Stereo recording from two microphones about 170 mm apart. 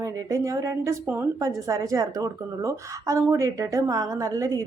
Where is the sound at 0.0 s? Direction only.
20° right (ahead or behind).